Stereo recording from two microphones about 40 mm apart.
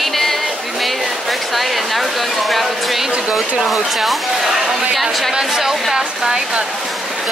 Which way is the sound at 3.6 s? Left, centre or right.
Centre.